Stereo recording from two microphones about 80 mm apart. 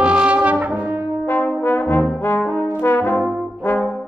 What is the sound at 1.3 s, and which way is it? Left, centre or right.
Trombone, left.